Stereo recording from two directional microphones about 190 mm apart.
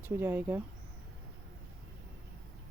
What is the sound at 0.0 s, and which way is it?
Speech, 10° right (ahead or behind).